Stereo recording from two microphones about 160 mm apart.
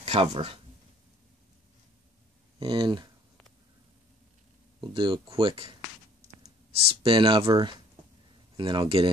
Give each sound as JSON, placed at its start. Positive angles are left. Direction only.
{"t": 0.0, "sound": "speech", "side_deg": -35}
{"t": 2.6, "sound": "speech", "side_deg": -25}
{"t": 4.7, "sound": "speech", "side_deg": -30}
{"t": 6.8, "sound": "speech", "side_deg": -35}